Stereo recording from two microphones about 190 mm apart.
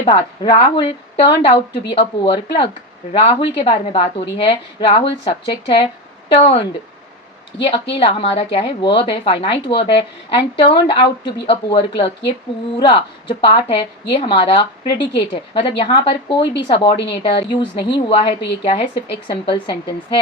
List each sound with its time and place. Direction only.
0.0 s a woman's voice: 25° left (ahead or behind)